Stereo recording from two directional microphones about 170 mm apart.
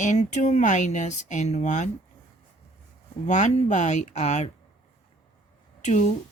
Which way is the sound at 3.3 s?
45° left (ahead or behind).